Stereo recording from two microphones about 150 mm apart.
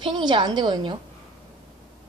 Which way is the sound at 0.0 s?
30° right (ahead or behind).